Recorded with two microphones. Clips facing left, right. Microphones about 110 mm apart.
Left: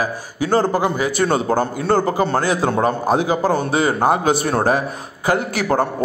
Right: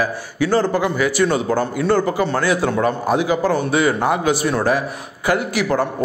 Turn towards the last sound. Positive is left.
turn(degrees=45)  # may be behind; listen again after turning